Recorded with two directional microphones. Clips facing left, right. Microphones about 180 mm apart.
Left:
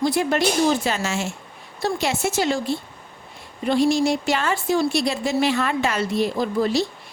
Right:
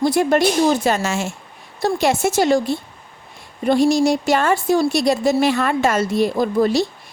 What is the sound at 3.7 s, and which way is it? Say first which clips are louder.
A woman's voice: right 4 dB; 45° right (ahead or behind).